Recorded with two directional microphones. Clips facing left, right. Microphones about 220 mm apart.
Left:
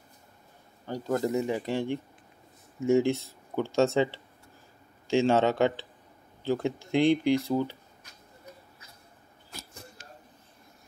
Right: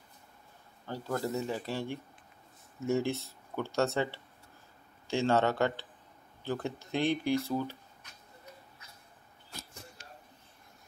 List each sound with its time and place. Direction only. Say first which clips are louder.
0.8 s speech: left 6 dB; 15° left (ahead or behind)